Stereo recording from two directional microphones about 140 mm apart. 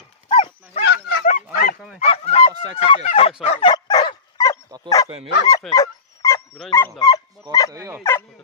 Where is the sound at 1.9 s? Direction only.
50° left (ahead or behind).